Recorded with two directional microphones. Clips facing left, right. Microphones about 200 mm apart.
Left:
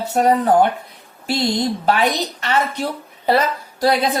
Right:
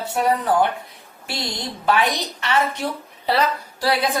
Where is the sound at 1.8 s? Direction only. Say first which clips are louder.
Right 3 dB; 40° left (ahead or behind).